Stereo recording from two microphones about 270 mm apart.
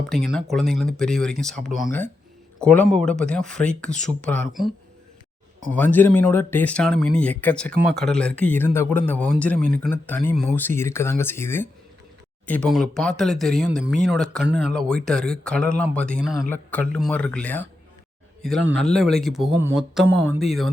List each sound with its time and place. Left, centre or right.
0.5 s speech: centre
5.7 s speech: centre
14.4 s speech: right
14.7 s speech: centre
18.8 s speech: centre